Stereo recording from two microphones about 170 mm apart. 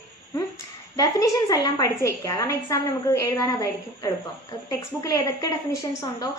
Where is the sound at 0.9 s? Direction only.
20° left (ahead or behind).